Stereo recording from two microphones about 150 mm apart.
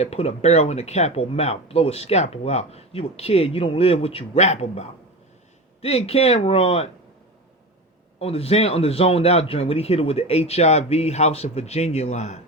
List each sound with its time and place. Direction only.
0.0 s speech: 45° left (ahead or behind)
8.2 s speech: 40° left (ahead or behind)